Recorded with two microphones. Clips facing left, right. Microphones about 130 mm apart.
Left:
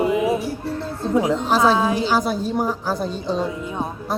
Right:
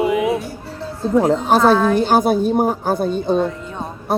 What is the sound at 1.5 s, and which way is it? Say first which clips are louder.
A woman's voice: right 4 dB; 60° right (ahead or behind).